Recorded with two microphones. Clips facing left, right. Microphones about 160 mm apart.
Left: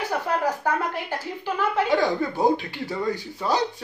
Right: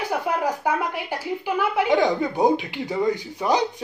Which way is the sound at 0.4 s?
10° right (ahead or behind).